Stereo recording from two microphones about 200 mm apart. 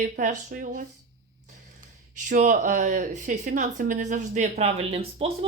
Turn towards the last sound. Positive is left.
turn(degrees=-30)  # may be behind; listen again after turning